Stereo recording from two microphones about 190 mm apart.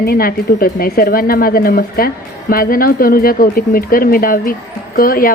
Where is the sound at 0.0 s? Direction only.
50° left (ahead or behind).